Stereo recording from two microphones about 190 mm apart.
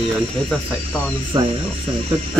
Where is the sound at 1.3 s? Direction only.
25° right (ahead or behind).